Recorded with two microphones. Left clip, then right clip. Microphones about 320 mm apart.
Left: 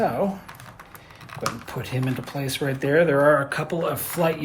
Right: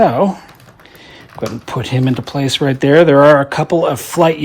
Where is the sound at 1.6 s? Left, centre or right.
Right.